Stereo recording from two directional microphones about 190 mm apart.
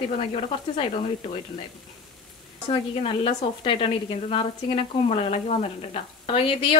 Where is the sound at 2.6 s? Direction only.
30° left (ahead or behind).